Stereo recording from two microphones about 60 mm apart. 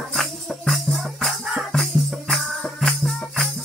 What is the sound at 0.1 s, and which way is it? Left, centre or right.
Music, centre.